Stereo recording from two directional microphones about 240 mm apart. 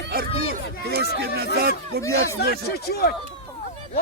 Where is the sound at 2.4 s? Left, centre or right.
Left.